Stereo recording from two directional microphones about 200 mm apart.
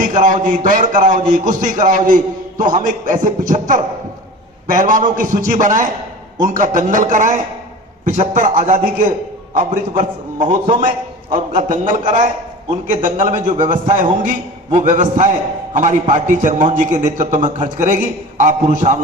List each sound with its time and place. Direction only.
0.1 s a man's voice: 40° right (ahead or behind)
10.0 s a man's voice: 40° right (ahead or behind)